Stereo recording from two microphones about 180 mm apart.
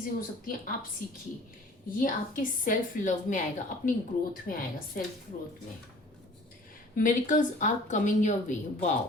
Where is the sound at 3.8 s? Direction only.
55° left (ahead or behind).